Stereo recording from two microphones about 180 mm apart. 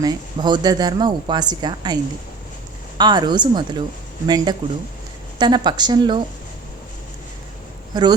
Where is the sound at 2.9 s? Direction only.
25° right (ahead or behind).